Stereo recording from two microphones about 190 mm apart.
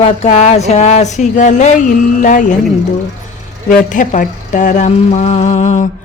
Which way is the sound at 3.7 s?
45° left (ahead or behind).